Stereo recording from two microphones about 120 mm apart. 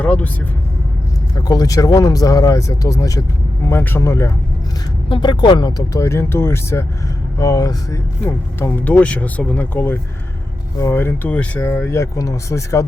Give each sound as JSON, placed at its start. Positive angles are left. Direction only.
{"t": 0.0, "sound": "speech", "side_deg": 10}
{"t": 1.4, "sound": "speech", "side_deg": 30}
{"t": 5.0, "sound": "speech", "side_deg": 40}
{"t": 8.5, "sound": "speech", "side_deg": 15}